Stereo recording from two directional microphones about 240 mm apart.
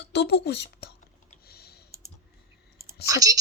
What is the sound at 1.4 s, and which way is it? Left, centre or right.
Typing, left.